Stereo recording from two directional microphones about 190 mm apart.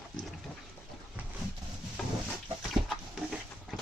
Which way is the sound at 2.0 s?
5° left (ahead or behind).